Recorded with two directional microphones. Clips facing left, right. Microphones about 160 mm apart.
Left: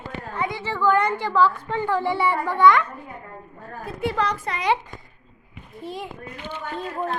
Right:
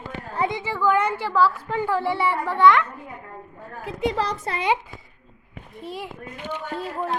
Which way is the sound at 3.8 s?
20° right (ahead or behind).